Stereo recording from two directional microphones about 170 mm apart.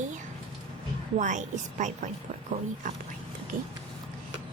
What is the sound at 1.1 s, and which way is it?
Speech, 45° right (ahead or behind).